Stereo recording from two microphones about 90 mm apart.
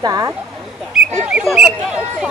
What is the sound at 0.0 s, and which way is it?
Speech, 45° right (ahead or behind).